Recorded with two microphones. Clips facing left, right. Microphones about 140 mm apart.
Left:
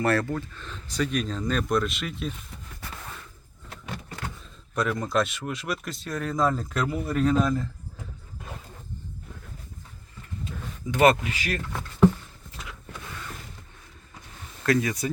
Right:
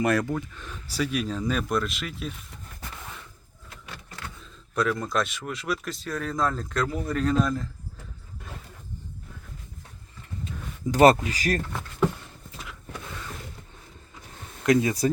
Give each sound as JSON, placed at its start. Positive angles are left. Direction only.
{"t": 0.0, "sound": "speech", "side_deg": -15}
{"t": 4.7, "sound": "speech", "side_deg": 0}
{"t": 10.9, "sound": "speech", "side_deg": -40}
{"t": 14.6, "sound": "speech", "side_deg": -20}